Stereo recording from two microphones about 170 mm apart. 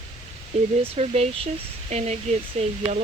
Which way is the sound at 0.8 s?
35° right (ahead or behind).